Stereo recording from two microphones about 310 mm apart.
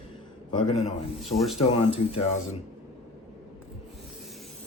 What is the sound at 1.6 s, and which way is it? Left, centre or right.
Speech, centre.